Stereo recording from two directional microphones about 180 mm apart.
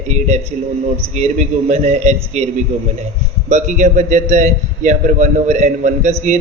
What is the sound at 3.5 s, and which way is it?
A man's voice, 45° right (ahead or behind).